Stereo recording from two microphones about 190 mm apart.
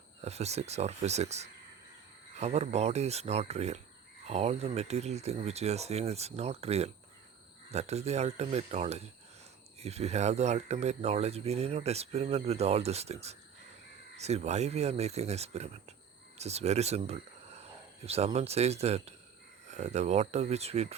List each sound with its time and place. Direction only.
0.2 s speech: 35° right (ahead or behind)